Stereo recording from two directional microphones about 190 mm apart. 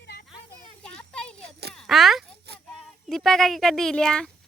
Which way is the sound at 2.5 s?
55° right (ahead or behind).